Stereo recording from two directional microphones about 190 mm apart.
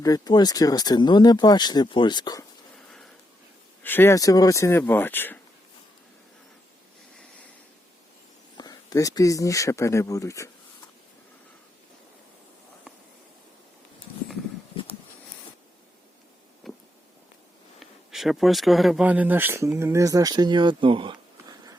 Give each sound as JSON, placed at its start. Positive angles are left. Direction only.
{"t": 0.0, "sound": "speech", "side_deg": 20}
{"t": 3.8, "sound": "speech", "side_deg": 10}
{"t": 8.5, "sound": "speech", "side_deg": 20}
{"t": 16.7, "sound": "a sound", "side_deg": 0}
{"t": 17.7, "sound": "speech", "side_deg": 0}